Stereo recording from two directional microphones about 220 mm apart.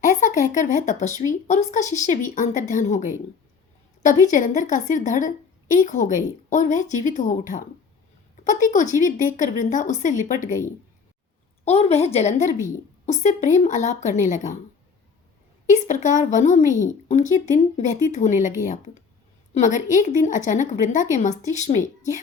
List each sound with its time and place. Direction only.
0.0 s a sound: 35° left (ahead or behind)
1.3 s speech: 35° left (ahead or behind)
4.3 s a woman's voice: 35° left (ahead or behind)
15.7 s speech: 35° left (ahead or behind)